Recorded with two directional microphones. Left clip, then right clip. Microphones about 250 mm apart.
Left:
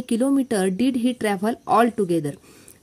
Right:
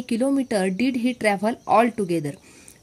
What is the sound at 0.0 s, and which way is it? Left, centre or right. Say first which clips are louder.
A woman's voice: left 1 dB; left.